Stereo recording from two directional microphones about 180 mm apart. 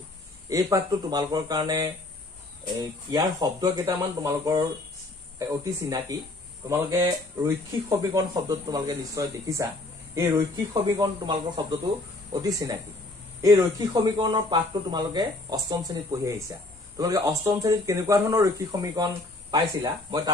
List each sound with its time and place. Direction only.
0.5 s speech: 15° right (ahead or behind)